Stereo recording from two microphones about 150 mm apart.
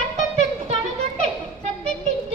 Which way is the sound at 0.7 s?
45° right (ahead or behind).